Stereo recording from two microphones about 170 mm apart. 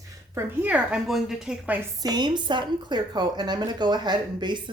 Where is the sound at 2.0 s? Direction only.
25° right (ahead or behind).